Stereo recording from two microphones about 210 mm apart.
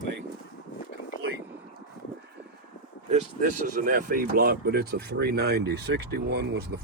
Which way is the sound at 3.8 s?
40° right (ahead or behind).